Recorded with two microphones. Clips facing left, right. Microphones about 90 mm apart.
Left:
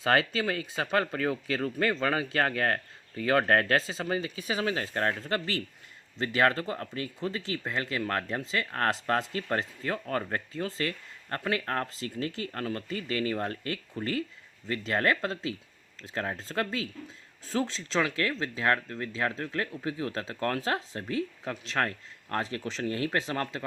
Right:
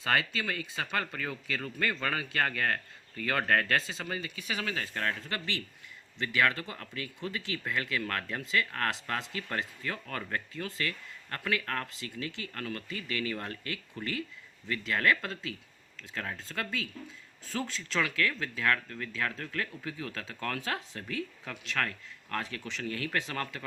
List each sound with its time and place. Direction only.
0.0 s speech: 35° left (ahead or behind)